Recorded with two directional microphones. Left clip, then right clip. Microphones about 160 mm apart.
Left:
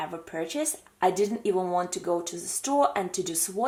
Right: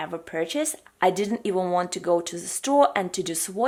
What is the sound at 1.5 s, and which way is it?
Speech, 40° right (ahead or behind).